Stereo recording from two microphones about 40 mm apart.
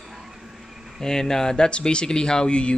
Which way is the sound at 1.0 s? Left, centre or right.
Centre.